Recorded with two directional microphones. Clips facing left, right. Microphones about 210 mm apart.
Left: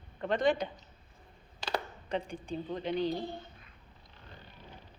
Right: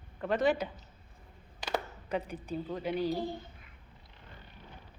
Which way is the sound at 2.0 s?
5° right (ahead or behind).